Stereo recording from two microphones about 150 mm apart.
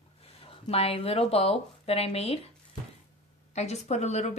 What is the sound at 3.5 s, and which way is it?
Speech, 50° left (ahead or behind).